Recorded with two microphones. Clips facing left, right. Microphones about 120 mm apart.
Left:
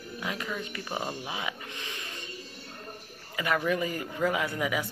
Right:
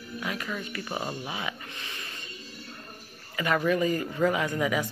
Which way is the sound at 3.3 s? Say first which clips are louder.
Right 3 dB; 10° left (ahead or behind).